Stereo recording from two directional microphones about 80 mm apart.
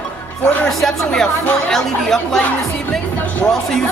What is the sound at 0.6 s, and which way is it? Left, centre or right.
Speech, centre.